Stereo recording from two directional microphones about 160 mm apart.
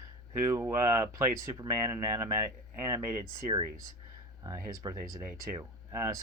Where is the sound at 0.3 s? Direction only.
15° right (ahead or behind).